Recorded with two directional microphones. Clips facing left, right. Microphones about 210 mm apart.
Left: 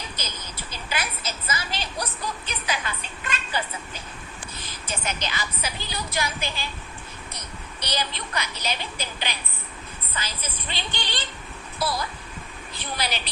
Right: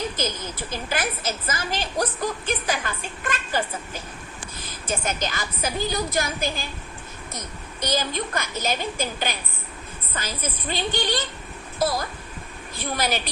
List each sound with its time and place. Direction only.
0.2 s a woman's voice: 50° right (ahead or behind)